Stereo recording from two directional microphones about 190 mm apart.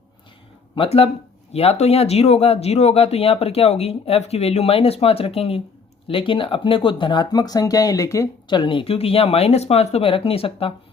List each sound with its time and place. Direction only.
0.8 s speech: 30° left (ahead or behind)